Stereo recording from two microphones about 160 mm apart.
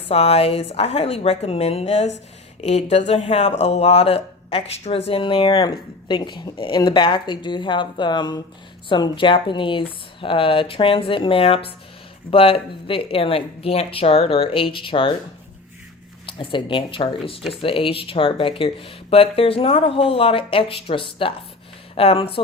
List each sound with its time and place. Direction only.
0.1 s a woman's voice: 40° left (ahead or behind)
16.2 s a woman's voice: 30° left (ahead or behind)